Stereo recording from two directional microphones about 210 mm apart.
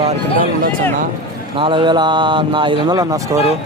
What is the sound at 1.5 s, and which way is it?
Speech, 25° right (ahead or behind).